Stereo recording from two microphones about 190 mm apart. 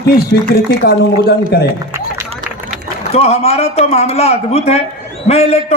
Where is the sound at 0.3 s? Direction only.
55° left (ahead or behind).